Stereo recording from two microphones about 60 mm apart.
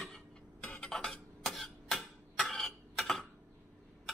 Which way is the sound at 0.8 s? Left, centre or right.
Centre.